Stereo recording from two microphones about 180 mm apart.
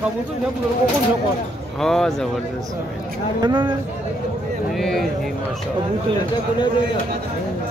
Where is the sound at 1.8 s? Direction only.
Centre (ahead or behind).